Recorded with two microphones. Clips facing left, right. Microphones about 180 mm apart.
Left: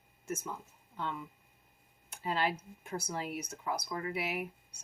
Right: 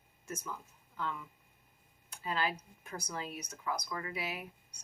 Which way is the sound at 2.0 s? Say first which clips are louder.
Left 2 dB; 25° left (ahead or behind).